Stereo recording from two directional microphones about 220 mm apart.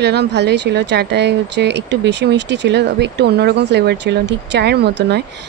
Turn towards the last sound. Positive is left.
turn(degrees=-50)  # may be behind; listen again after turning